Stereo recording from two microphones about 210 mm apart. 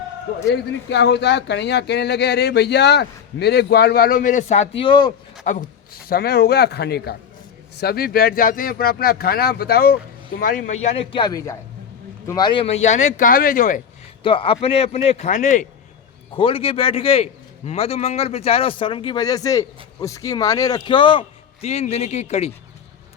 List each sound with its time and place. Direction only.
0.5 s speech: 55° left (ahead or behind); by 5.1 s 20° left (ahead or behind)
5.5 s speech: 45° left (ahead or behind)
10.9 s speech: 20° left (ahead or behind); by 13.8 s 40° left (ahead or behind)
14.3 s speech: 25° left (ahead or behind)
16.3 s speech: 25° left (ahead or behind)